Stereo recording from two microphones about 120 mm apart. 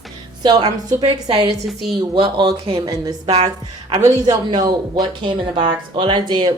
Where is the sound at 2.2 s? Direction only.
40° right (ahead or behind).